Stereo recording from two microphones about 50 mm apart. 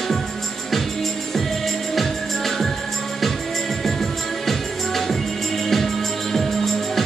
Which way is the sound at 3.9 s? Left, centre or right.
Centre.